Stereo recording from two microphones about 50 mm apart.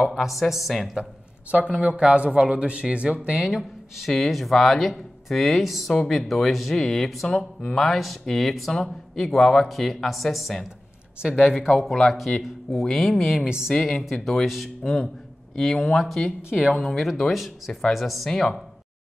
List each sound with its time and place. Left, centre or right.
0.0 s speech: centre
1.5 s speech: right
3.3 s speech: centre
7.2 s speech: centre
7.8 s speech: centre
13.5 s speech: centre
13.7 s speech: centre
16.4 s speech: centre
16.7 s speech: centre